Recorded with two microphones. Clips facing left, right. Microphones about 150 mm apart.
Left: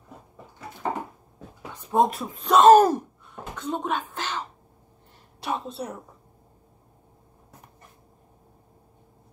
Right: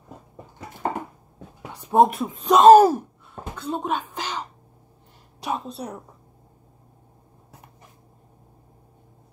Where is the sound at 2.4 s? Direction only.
10° right (ahead or behind).